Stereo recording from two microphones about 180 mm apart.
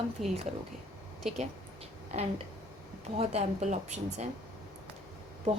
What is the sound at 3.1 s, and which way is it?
Speech, 35° right (ahead or behind).